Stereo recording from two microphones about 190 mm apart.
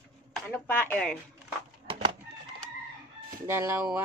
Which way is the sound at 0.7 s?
5° left (ahead or behind).